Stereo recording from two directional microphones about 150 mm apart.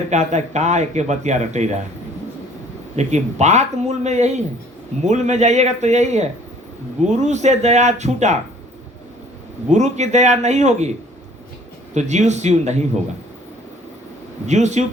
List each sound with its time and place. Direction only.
0.1 s speech: 50° right (ahead or behind)
2.9 s speech: 50° right (ahead or behind)
9.6 s speech: 50° right (ahead or behind)
11.9 s speech: 50° right (ahead or behind)
14.4 s speech: 50° right (ahead or behind)